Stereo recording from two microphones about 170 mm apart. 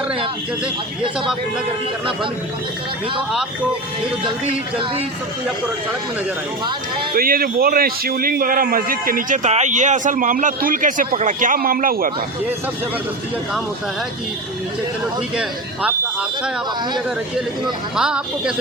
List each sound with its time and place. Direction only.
7.1 s a man's voice: 60° right (ahead or behind)
15.4 s a woman's voice: 5° right (ahead or behind)
17.9 s a woman's voice: 5° right (ahead or behind)